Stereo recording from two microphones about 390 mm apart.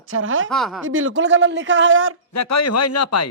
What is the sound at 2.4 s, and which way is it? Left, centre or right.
Speech, left.